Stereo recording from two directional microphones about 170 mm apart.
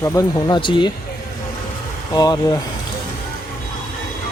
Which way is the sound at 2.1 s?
20° left (ahead or behind).